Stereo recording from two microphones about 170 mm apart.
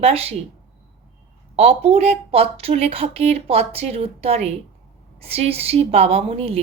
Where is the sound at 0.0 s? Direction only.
35° right (ahead or behind).